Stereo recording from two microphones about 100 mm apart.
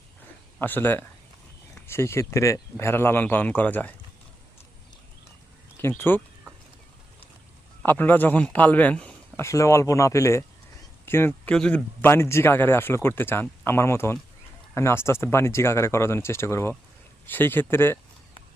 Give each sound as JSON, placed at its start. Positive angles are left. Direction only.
{"t": 0.6, "sound": "speech", "side_deg": 20}
{"t": 5.8, "sound": "speech", "side_deg": 20}
{"t": 7.9, "sound": "a man's voice", "side_deg": 20}
{"t": 9.4, "sound": "a man's voice", "side_deg": 30}
{"t": 11.4, "sound": "a man's voice", "side_deg": 10}
{"t": 12.0, "sound": "speech", "side_deg": 25}